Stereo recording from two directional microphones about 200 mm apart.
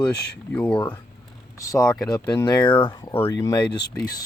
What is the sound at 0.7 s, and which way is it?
Speech, 20° left (ahead or behind).